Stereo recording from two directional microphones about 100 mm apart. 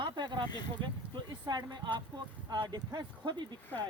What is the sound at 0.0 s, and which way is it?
Speech, 50° right (ahead or behind).